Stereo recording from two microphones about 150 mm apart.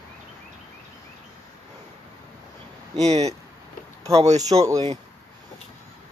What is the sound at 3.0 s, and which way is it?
Speech, 45° right (ahead or behind).